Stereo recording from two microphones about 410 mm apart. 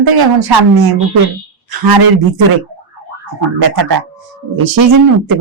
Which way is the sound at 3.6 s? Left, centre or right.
Right.